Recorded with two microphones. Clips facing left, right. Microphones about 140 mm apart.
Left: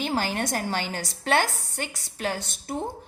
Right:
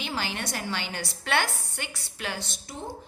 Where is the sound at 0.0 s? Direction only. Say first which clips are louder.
Left 6 dB; 45° left (ahead or behind).